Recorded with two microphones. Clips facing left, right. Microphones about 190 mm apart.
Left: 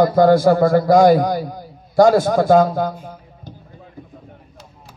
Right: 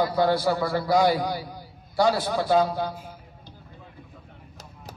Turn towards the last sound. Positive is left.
turn(degrees=45)  # may be behind; listen again after turning